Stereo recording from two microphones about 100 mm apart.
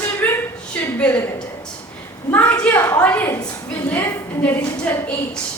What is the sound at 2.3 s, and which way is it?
A woman's voice, 15° left (ahead or behind).